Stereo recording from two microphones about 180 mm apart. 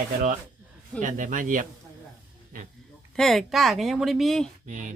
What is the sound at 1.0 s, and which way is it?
Speech, 45° right (ahead or behind).